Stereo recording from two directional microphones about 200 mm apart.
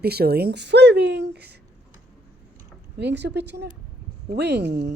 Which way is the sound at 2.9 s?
60° right (ahead or behind).